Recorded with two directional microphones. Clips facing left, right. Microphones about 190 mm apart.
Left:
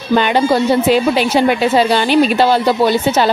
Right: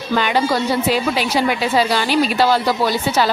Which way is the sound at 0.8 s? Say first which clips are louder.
Left 6 dB; 25° left (ahead or behind).